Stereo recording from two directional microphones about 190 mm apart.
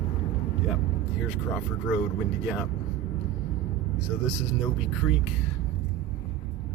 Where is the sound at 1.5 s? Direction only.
Centre (ahead or behind).